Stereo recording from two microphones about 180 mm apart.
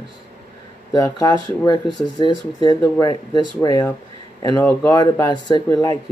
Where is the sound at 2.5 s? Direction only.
25° left (ahead or behind).